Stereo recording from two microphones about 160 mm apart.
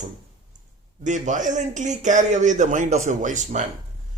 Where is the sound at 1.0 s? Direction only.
50° right (ahead or behind).